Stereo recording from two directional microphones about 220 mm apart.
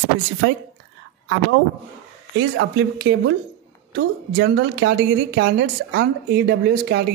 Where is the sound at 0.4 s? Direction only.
70° right (ahead or behind).